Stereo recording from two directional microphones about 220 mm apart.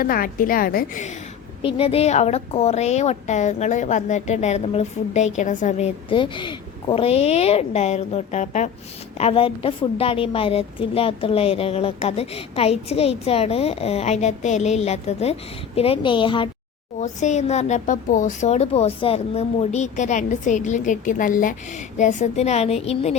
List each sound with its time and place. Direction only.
0.0 s speech: 40° left (ahead or behind)
1.6 s a woman's voice: 25° left (ahead or behind)
17.0 s a woman's voice: 35° left (ahead or behind)